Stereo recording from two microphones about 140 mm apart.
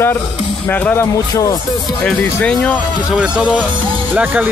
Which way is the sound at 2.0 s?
10° left (ahead or behind).